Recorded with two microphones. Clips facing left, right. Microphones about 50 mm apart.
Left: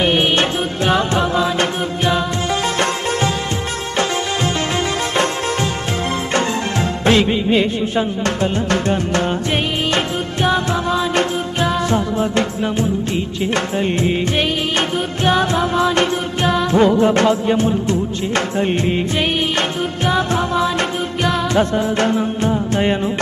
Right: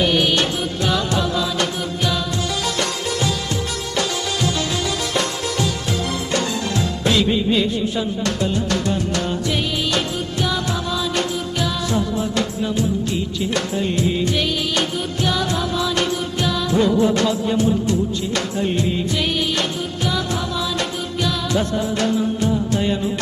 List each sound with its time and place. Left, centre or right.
0.0 s music: left
5.1 s music: left
20.1 s music: left